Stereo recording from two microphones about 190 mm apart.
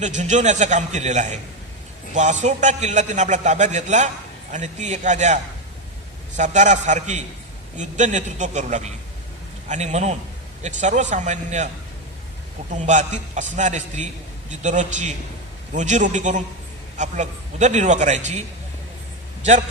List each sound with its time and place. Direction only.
0.0 s a man's voice: 40° right (ahead or behind)
12.7 s a man's voice: 40° right (ahead or behind)